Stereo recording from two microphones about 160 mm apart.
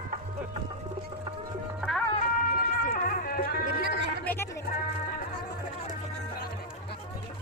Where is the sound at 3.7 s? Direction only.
90° right.